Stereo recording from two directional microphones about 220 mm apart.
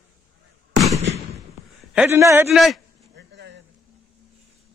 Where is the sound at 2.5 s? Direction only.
Centre (ahead or behind).